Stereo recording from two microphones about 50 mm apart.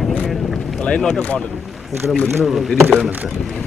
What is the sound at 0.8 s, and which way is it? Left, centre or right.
Speech, left.